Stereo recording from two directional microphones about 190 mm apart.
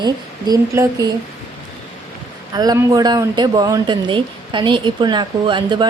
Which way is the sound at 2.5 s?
20° right (ahead or behind).